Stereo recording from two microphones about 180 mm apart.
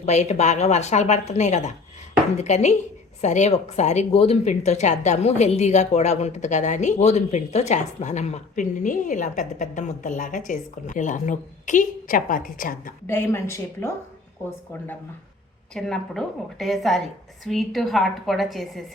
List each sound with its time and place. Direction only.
0.0 s speech: 40° left (ahead or behind)
13.1 s a woman's voice: 15° left (ahead or behind)
15.7 s a woman's voice: centre (ahead or behind)